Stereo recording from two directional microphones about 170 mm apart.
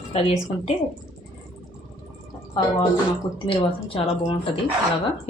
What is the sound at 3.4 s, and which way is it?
Speech, 30° left (ahead or behind).